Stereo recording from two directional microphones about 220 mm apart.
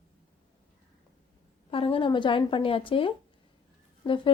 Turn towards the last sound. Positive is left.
turn(degrees=25)  # may be behind; listen again after turning